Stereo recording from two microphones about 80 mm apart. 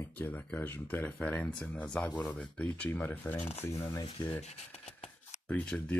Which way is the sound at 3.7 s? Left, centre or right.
Left.